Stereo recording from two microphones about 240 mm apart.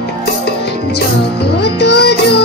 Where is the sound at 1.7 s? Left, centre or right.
Left.